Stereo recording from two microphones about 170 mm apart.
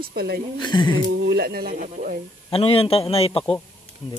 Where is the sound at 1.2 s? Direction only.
75° right (ahead or behind).